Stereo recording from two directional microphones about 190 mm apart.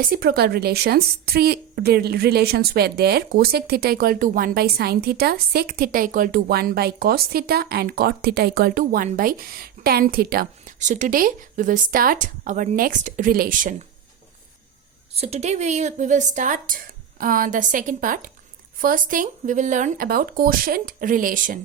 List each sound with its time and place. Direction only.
0.0 s a woman's voice: 50° right (ahead or behind)
15.1 s a woman's voice: 30° right (ahead or behind)